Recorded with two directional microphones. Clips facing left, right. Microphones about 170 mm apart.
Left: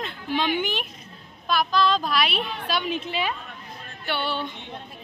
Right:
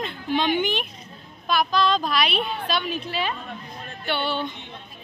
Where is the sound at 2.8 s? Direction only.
20° left (ahead or behind).